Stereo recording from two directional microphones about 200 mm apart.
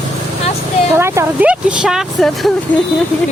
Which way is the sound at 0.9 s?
15° right (ahead or behind).